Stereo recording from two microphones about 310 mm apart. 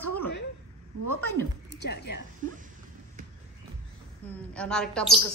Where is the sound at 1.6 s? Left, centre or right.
Left.